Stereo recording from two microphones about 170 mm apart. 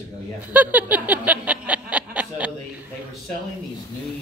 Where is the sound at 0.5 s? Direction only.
10° right (ahead or behind).